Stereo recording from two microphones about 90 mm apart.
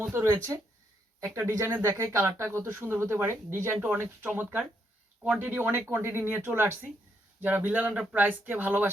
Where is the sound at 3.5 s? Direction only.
20° right (ahead or behind).